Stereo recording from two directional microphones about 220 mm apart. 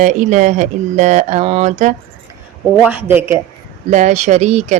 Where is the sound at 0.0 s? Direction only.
35° right (ahead or behind).